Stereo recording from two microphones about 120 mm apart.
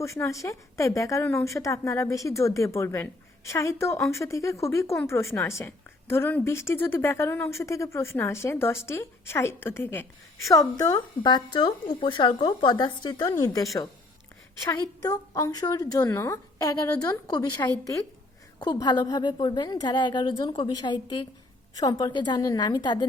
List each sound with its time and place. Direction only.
0.0 s a woman's voice: 25° left (ahead or behind)
14.7 s a woman's voice: 30° left (ahead or behind)